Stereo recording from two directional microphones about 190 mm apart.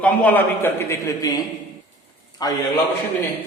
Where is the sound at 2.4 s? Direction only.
20° left (ahead or behind).